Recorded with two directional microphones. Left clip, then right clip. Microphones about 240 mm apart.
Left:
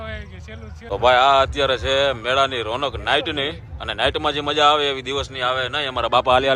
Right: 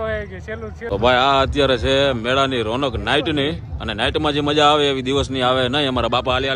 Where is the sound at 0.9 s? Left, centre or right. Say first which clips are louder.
Left 1 dB; centre.